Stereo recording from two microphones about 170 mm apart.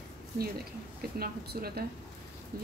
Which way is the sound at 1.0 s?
65° right (ahead or behind).